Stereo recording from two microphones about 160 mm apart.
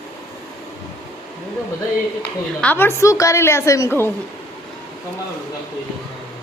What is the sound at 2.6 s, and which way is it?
A woman's voice, 15° left (ahead or behind).